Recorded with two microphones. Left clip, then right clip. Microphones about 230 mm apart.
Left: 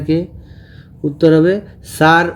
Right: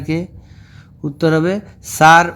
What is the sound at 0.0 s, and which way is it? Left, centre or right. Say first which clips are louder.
A man's voice: left 5 dB; right.